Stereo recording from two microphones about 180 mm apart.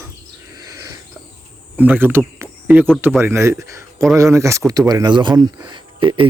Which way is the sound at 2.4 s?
10° right (ahead or behind).